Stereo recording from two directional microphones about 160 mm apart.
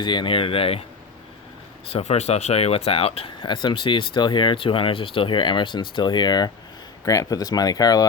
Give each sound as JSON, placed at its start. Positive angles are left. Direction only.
{"t": 0.0, "sound": "speech", "side_deg": 30}
{"t": 1.9, "sound": "speech", "side_deg": 40}